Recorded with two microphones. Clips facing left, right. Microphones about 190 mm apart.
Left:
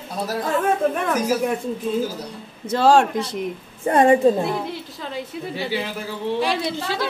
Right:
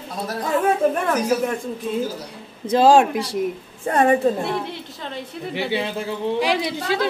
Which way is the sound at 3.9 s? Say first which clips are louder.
Left 2 dB; 15° left (ahead or behind).